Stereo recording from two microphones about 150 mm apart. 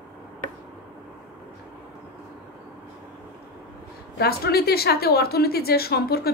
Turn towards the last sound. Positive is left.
turn(degrees=90)